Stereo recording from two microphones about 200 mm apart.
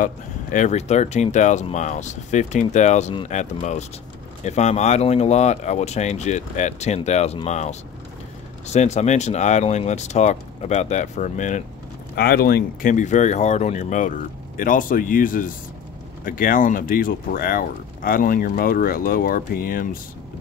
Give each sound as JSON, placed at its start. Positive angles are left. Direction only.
{"t": 0.0, "sound": "speech", "side_deg": 40}
{"t": 12.2, "sound": "speech", "side_deg": 50}